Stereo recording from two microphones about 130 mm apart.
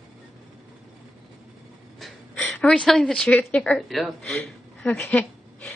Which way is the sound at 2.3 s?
10° left (ahead or behind).